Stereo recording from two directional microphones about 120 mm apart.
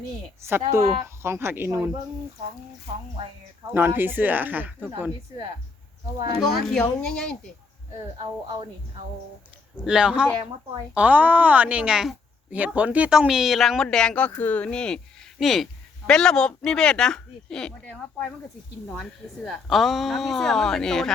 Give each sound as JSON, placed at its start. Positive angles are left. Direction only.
{"t": 0.4, "sound": "speech", "side_deg": -20}
{"t": 3.8, "sound": "a woman's voice", "side_deg": -15}
{"t": 6.4, "sound": "speech", "side_deg": 5}
{"t": 9.7, "sound": "a woman's voice", "side_deg": -5}
{"t": 19.5, "sound": "speech", "side_deg": 0}